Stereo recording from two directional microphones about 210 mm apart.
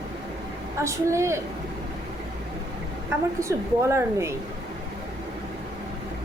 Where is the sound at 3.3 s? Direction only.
15° right (ahead or behind).